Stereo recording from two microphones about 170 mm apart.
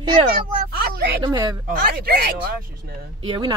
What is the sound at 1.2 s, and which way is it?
Speech, 25° right (ahead or behind).